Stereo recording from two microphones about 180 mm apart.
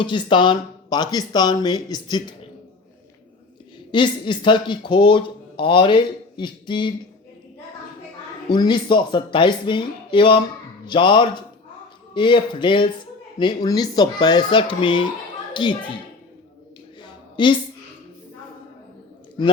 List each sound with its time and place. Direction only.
0.0 s speech: 25° left (ahead or behind)
3.9 s speech: 25° left (ahead or behind)
8.4 s a woman's voice: 25° left (ahead or behind)
17.3 s a woman's voice: 25° left (ahead or behind)